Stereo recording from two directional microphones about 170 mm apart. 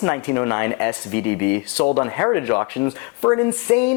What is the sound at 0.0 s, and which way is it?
Speech, 15° left (ahead or behind).